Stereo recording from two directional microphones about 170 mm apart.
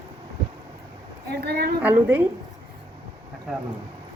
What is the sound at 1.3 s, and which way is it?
Speech, 70° right (ahead or behind).